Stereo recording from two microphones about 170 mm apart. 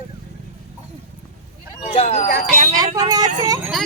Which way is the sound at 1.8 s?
35° left (ahead or behind).